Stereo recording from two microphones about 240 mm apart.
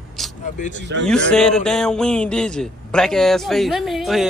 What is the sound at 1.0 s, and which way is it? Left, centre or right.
A man's voice, centre.